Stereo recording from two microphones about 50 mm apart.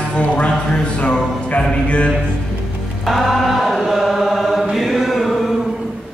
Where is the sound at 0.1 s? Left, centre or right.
Left.